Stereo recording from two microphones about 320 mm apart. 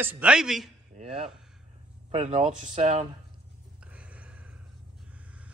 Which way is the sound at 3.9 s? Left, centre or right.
Centre.